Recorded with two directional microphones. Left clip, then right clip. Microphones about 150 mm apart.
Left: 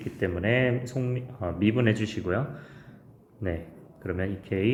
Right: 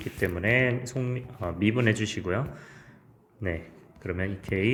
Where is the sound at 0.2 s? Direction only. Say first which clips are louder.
Right 1 dB; 35° right (ahead or behind).